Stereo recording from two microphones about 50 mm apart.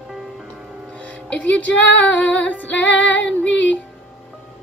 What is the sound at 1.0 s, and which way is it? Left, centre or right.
Music, left.